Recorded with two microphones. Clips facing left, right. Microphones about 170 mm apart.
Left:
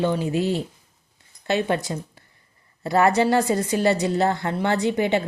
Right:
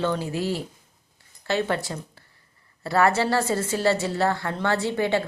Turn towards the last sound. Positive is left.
turn(degrees=20)  # may be behind; listen again after turning